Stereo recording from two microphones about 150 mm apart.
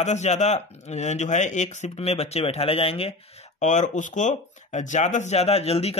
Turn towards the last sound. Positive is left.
turn(degrees=40)  # may be behind; listen again after turning